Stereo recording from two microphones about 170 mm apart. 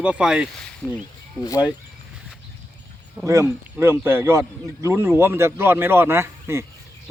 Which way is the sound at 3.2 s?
15° right (ahead or behind).